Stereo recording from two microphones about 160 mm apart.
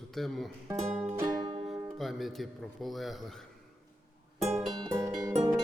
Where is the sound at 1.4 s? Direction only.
30° right (ahead or behind).